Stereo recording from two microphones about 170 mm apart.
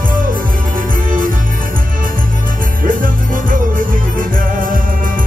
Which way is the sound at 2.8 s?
55° right (ahead or behind).